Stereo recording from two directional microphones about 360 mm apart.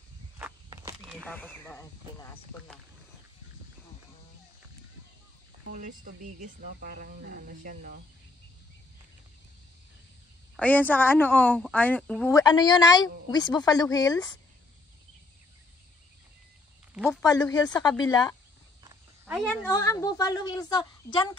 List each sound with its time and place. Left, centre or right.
0.4 s walk: centre
1.1 s speech: centre
5.7 s speech: right
10.5 s speech: centre
16.9 s speech: centre
17.2 s speech: centre
18.9 s speech: centre